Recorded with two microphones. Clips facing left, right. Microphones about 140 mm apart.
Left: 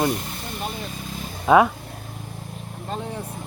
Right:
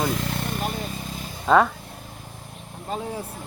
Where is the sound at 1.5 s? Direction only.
10° left (ahead or behind).